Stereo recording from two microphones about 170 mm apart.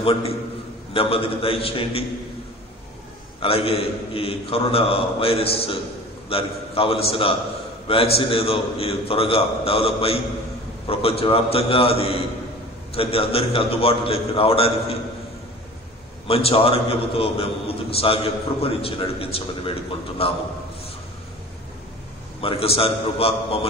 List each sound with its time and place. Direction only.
0.0 s a man's voice: 35° left (ahead or behind)
3.3 s a man's voice: 35° left (ahead or behind)
16.3 s a man's voice: 35° left (ahead or behind)
22.4 s a man's voice: 35° left (ahead or behind)